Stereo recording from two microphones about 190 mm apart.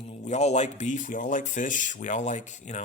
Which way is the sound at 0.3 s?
35° left (ahead or behind).